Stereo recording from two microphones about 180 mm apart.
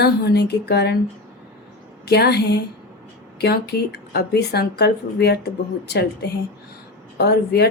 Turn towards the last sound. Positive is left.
turn(degrees=65)  # may be behind; listen again after turning